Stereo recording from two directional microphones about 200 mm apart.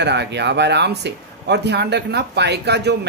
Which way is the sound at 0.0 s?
60° right (ahead or behind).